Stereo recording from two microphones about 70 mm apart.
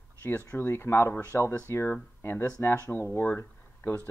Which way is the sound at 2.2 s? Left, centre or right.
Left.